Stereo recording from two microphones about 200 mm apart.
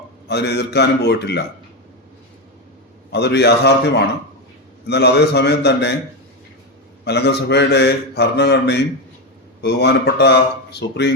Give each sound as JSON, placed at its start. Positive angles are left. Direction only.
{"t": 0.3, "sound": "a man's voice", "side_deg": 55}
{"t": 3.1, "sound": "a man's voice", "side_deg": 55}
{"t": 4.9, "sound": "a man's voice", "side_deg": 55}
{"t": 7.0, "sound": "a man's voice", "side_deg": 55}